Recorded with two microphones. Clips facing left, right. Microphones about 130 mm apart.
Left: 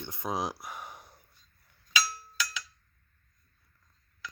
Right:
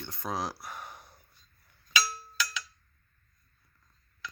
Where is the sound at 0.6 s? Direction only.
10° left (ahead or behind).